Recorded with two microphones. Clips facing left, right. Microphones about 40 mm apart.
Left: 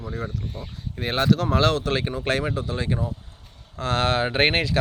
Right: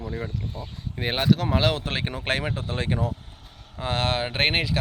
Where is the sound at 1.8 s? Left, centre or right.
Right.